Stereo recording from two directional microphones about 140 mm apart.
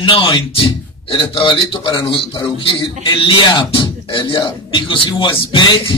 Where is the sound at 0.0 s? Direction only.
35° left (ahead or behind).